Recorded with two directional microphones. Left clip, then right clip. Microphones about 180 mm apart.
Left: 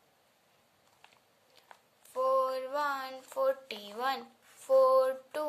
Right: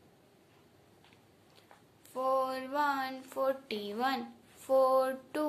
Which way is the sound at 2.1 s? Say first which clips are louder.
Left 2 dB; 40° left (ahead or behind).